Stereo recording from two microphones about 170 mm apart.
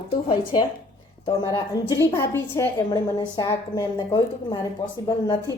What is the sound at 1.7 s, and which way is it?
A woman's voice, 20° left (ahead or behind).